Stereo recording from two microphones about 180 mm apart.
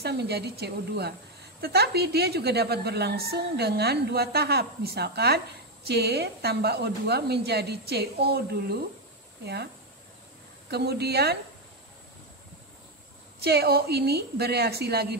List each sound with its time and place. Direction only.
0.0 s a woman's voice: 65° right (ahead or behind)
10.7 s a woman's voice: 65° right (ahead or behind)
13.4 s a woman's voice: 60° right (ahead or behind)